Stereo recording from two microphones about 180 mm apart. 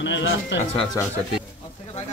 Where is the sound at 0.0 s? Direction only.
90° left.